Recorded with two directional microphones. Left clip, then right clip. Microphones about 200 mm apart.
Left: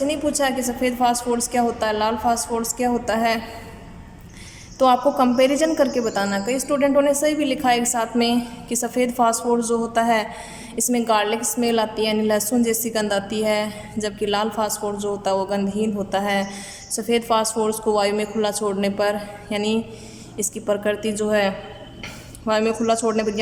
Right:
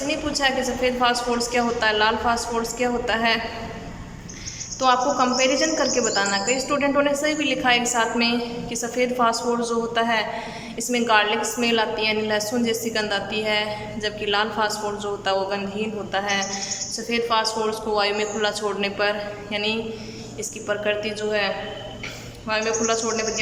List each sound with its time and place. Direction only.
0.1 s a woman's voice: 30° left (ahead or behind)
4.8 s a woman's voice: 30° left (ahead or behind)